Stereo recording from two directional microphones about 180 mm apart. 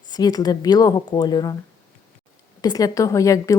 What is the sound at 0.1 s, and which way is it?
A woman's voice, 20° left (ahead or behind).